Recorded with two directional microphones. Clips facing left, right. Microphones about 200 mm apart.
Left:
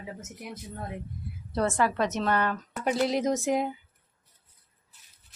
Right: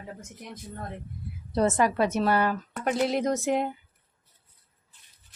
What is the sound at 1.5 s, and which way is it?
Speech, 20° right (ahead or behind).